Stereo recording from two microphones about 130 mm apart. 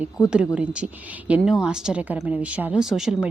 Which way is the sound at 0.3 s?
10° right (ahead or behind).